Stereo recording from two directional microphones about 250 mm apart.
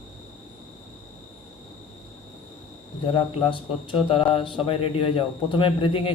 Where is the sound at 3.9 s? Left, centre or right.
Left.